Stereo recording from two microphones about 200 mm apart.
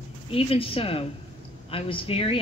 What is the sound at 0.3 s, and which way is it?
A woman's voice, 25° left (ahead or behind).